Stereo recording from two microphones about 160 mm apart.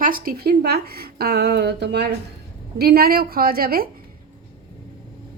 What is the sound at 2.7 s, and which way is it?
A woman's voice, 75° right (ahead or behind).